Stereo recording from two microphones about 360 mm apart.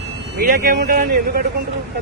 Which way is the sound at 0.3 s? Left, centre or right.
Right.